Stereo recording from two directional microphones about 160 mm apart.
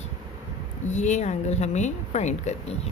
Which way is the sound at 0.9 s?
45° left (ahead or behind).